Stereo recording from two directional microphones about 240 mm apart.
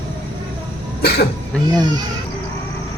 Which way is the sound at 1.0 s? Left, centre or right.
Left.